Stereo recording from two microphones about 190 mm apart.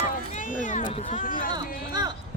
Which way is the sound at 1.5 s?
20° right (ahead or behind).